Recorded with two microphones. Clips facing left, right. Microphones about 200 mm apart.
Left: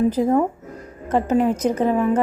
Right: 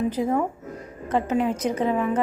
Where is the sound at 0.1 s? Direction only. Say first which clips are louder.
Left 5 dB; 40° left (ahead or behind).